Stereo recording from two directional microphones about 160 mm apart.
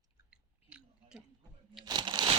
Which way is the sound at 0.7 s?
5° right (ahead or behind).